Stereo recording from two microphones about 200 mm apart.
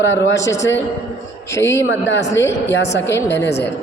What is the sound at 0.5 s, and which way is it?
Speech, 65° left (ahead or behind).